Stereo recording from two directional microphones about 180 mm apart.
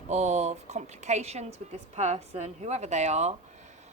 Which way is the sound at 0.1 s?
40° right (ahead or behind).